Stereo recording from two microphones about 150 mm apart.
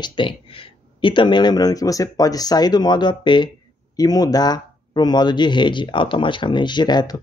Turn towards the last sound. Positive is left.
turn(degrees=30)  # may be behind; listen again after turning